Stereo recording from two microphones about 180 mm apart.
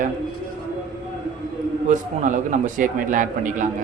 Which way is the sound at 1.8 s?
45° right (ahead or behind).